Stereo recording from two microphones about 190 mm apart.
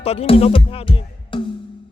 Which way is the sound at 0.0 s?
30° left (ahead or behind).